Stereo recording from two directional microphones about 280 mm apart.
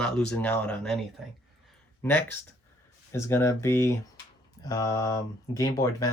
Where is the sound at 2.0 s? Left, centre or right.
Centre.